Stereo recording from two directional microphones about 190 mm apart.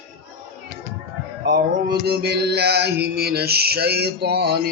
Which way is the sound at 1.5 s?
60° right (ahead or behind).